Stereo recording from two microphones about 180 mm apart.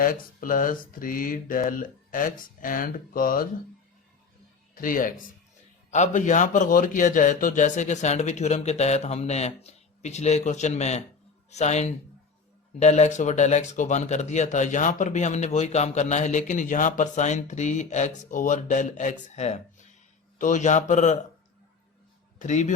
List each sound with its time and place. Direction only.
0.0 s speech: 50° left (ahead or behind)
4.7 s speech: 50° left (ahead or behind)
22.4 s a man's voice: 40° left (ahead or behind)